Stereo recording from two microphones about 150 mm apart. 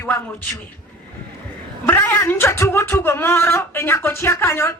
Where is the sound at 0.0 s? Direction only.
15° left (ahead or behind).